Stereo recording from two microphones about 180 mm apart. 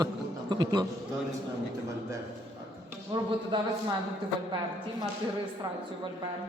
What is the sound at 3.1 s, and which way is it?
Speech, 25° right (ahead or behind).